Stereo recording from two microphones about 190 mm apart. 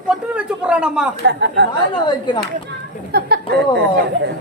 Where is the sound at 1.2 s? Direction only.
65° right (ahead or behind).